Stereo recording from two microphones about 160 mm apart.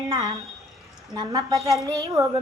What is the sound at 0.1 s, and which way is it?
A woman's voice, 20° right (ahead or behind).